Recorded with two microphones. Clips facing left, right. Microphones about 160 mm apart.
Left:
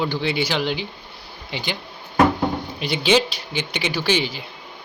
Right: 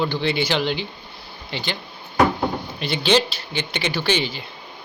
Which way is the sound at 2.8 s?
10° left (ahead or behind).